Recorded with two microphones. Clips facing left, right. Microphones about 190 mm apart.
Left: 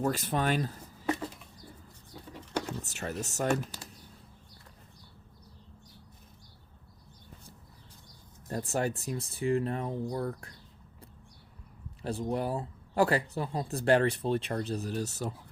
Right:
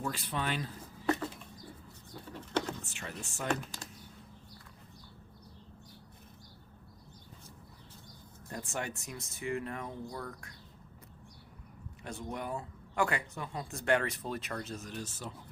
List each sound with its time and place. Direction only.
0.0 s speech: 45° left (ahead or behind)
2.3 s vehicle: 10° left (ahead or behind)
2.8 s speech: 40° left (ahead or behind)
8.4 s speech: 40° left (ahead or behind)
12.0 s speech: 35° left (ahead or behind)